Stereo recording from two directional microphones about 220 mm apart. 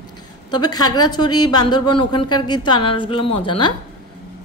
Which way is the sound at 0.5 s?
20° left (ahead or behind).